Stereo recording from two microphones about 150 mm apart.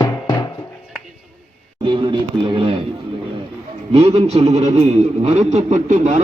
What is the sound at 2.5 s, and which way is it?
Bird, 35° right (ahead or behind).